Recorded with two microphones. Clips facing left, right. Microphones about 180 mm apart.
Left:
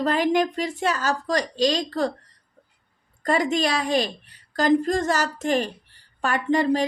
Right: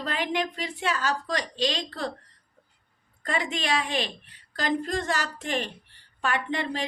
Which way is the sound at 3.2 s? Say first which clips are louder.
Left 8 dB; 40° left (ahead or behind).